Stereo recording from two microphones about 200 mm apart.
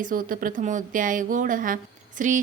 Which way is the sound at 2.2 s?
40° right (ahead or behind).